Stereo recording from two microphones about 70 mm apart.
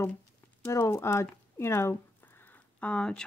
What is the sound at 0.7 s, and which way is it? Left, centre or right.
Speech, left.